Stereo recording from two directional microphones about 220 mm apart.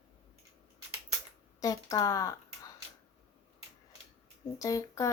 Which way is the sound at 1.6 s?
15° left (ahead or behind).